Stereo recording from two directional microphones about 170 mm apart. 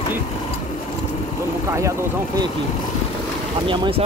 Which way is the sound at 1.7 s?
20° right (ahead or behind).